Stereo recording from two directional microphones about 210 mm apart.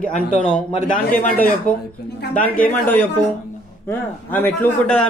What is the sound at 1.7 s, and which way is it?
Speech, 5° left (ahead or behind).